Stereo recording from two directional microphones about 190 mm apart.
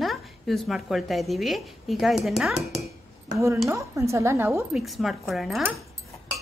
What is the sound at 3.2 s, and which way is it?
A woman's voice, 15° right (ahead or behind).